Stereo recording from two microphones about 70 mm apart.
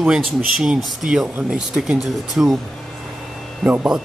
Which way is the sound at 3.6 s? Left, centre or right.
Centre.